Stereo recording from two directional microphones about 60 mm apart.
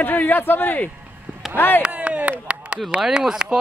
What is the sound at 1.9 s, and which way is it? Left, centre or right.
Speech, right.